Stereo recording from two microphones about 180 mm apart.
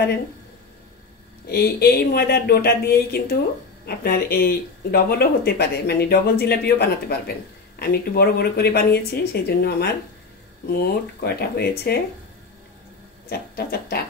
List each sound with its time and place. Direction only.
1.5 s speech: 60° left (ahead or behind)
13.3 s speech: 60° left (ahead or behind)